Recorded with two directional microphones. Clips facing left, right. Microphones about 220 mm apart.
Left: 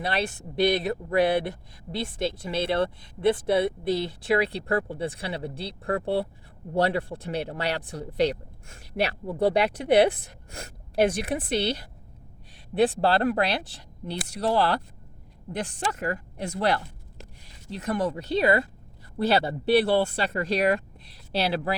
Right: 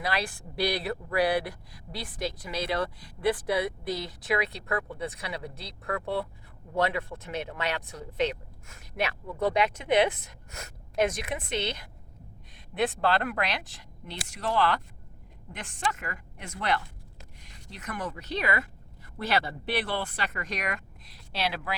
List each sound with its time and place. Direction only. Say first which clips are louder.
0.0 s speech: left 3 dB; 25° left (ahead or behind)